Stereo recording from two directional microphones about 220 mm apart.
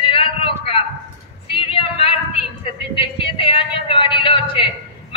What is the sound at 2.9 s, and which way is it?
A man's voice, 25° left (ahead or behind).